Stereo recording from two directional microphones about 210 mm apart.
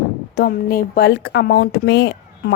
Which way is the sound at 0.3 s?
45° left (ahead or behind).